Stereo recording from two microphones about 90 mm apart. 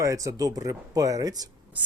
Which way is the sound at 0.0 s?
35° right (ahead or behind).